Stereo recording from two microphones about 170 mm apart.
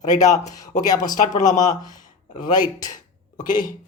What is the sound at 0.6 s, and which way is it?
Speech, 20° left (ahead or behind).